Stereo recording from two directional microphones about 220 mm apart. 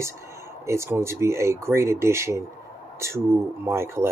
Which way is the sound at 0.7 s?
10° right (ahead or behind).